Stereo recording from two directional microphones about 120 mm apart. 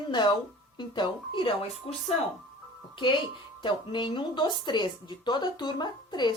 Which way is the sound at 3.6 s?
40° left (ahead or behind).